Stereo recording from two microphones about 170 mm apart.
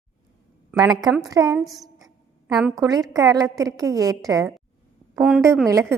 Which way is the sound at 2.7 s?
20° right (ahead or behind).